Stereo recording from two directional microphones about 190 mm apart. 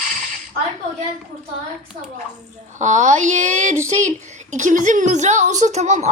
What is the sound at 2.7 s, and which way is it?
A woman's voice, 40° right (ahead or behind).